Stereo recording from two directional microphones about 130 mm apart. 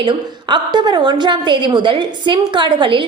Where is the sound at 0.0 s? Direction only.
35° right (ahead or behind).